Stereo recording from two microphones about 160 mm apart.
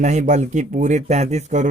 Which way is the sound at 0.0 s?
50° right (ahead or behind).